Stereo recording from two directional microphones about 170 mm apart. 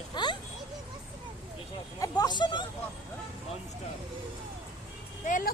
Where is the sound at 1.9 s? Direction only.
20° left (ahead or behind).